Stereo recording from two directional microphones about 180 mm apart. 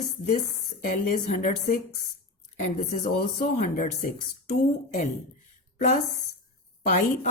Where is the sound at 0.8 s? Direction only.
45° left (ahead or behind).